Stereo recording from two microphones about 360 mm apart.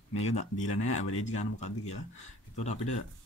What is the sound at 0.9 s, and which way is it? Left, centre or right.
Speech, left.